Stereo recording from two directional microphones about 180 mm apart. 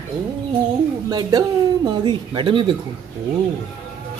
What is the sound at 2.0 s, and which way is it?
Speech, 25° right (ahead or behind).